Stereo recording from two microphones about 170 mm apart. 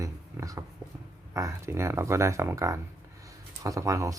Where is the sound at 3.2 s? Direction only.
20° right (ahead or behind).